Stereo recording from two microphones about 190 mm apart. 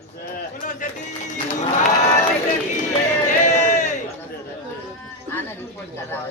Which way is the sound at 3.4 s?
40° left (ahead or behind).